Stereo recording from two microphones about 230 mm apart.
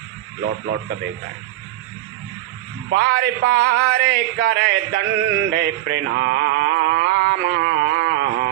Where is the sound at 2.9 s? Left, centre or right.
Right.